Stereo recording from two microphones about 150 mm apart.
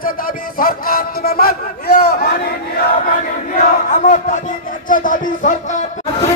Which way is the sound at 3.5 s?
55° left (ahead or behind).